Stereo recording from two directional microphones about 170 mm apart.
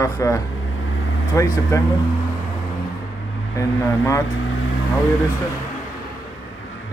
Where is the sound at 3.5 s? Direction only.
15° left (ahead or behind).